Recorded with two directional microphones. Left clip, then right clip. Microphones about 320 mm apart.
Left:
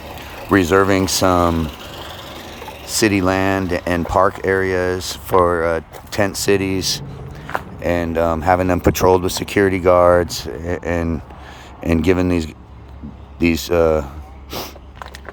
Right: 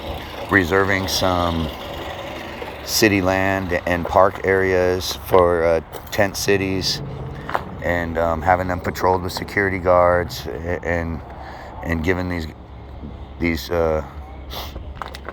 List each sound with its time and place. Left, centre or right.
0.4 s speech: centre
1.6 s a sound: centre
2.9 s speech: centre